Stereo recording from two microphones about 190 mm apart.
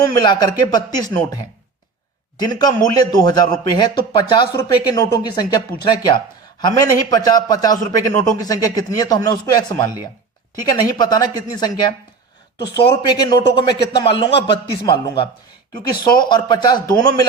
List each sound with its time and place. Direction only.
0.1 s speech: 20° left (ahead or behind)
2.4 s speech: 20° left (ahead or behind)
16.3 s speech: 25° left (ahead or behind)